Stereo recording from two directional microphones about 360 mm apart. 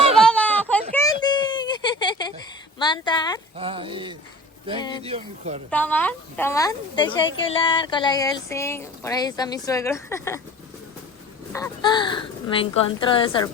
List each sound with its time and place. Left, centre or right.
0.2 s a sound: centre
3.6 s a sound: centre
4.8 s a woman's voice: centre
5.0 s speech: centre
5.7 s a woman's voice: centre
11.5 s a woman's voice: centre